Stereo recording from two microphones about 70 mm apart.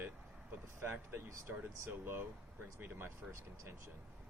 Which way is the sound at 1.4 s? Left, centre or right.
Right.